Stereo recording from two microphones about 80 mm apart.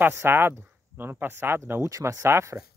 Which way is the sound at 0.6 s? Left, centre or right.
Centre.